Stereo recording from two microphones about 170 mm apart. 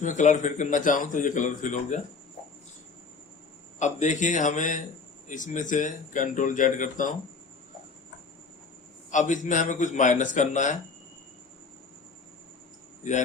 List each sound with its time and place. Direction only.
0.0 s speech: 45° left (ahead or behind)
3.8 s speech: 45° left (ahead or behind)
9.0 s speech: 45° left (ahead or behind)